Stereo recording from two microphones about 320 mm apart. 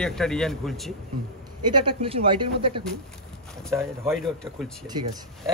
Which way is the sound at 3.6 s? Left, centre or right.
Centre.